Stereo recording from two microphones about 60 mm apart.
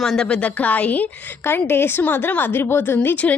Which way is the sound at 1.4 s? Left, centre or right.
Left.